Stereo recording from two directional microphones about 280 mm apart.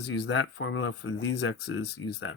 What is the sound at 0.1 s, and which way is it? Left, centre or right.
Speech, left.